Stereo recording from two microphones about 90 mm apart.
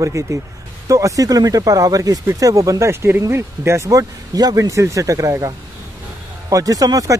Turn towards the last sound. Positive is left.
turn(degrees=-40)  # may be behind; listen again after turning